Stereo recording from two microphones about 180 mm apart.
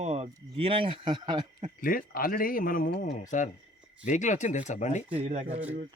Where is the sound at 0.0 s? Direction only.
35° right (ahead or behind).